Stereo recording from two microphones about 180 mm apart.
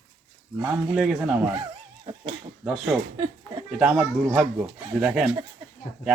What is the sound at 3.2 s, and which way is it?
Speech, 20° right (ahead or behind).